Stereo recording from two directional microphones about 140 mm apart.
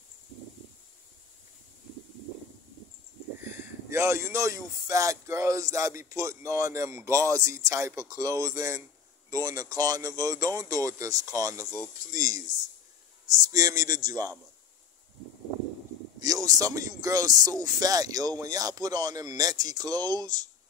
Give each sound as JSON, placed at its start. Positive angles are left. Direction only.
{"t": 3.4, "sound": "speech", "side_deg": -20}
{"t": 12.1, "sound": "a sound", "side_deg": -25}
{"t": 13.5, "sound": "speech", "side_deg": -25}
{"t": 16.2, "sound": "speech", "side_deg": -25}